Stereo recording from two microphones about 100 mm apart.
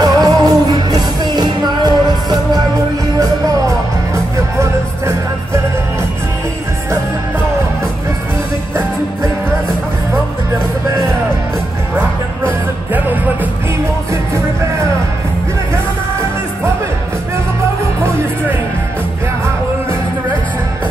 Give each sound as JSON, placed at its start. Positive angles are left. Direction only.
{"t": 0.0, "sound": "music", "side_deg": -40}
{"t": 4.1, "sound": "music", "side_deg": -30}
{"t": 12.4, "sound": "music", "side_deg": -20}
{"t": 18.0, "sound": "music", "side_deg": -25}